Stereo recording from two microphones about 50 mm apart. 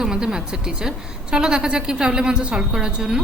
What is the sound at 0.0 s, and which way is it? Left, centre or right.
A woman's voice, centre.